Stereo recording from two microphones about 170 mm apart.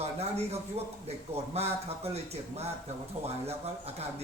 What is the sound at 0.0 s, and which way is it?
Speech, 40° right (ahead or behind).